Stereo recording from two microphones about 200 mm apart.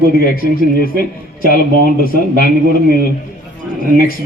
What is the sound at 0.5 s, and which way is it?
Speech, 45° left (ahead or behind).